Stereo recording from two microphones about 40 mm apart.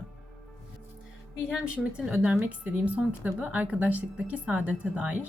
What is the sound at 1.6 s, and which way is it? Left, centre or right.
Speech, right.